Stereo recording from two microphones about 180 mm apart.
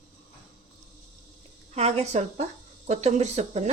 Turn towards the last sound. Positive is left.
turn(degrees=-40)  # may be behind; listen again after turning